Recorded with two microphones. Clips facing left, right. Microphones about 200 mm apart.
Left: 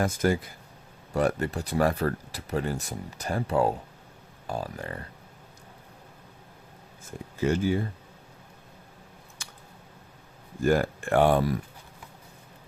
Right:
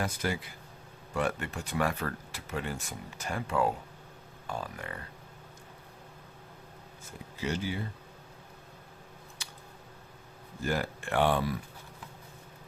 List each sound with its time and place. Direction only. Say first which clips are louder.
0.0 s speech: left 8 dB; 45° left (ahead or behind)
7.3 s speech: left 9 dB; 50° left (ahead or behind)
9.4 s scissors: left 3 dB; 50° left (ahead or behind)
10.6 s speech: left 9 dB; 50° left (ahead or behind)